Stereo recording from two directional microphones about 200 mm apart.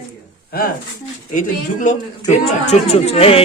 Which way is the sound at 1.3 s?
40° left (ahead or behind).